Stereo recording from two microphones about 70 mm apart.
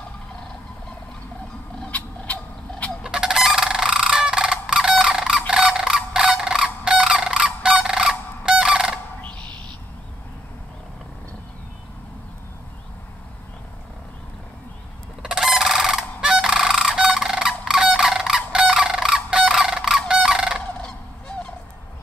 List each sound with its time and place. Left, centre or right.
1.9 s cat: left
3.0 s fowl: centre
15.2 s goose: centre